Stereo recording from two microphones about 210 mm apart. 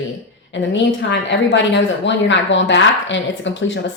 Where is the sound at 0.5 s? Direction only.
60° left (ahead or behind).